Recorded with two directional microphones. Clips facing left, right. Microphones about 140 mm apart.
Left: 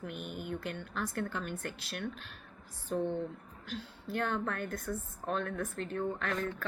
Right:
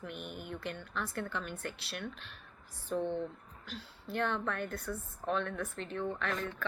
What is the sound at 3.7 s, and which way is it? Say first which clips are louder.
Speech: left 2 dB; 45° left (ahead or behind).